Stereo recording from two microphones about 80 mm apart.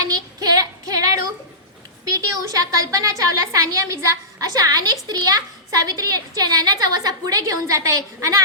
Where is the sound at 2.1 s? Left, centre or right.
Right.